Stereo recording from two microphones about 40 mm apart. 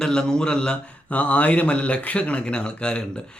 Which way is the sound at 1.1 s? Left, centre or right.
Left.